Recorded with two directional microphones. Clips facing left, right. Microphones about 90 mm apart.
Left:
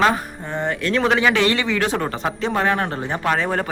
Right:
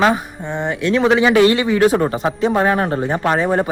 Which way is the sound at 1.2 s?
30° right (ahead or behind).